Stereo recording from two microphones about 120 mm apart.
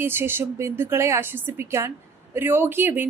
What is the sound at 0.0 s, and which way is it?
A woman's voice, 20° right (ahead or behind).